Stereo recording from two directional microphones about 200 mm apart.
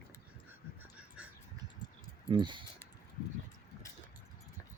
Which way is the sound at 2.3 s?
25° right (ahead or behind).